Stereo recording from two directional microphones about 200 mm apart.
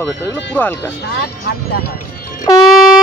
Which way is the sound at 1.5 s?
50° left (ahead or behind).